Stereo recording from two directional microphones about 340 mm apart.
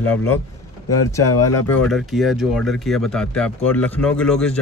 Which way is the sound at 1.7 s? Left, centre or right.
Centre.